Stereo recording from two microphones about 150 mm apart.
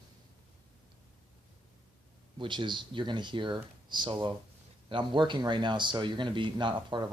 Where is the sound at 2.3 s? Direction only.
35° right (ahead or behind).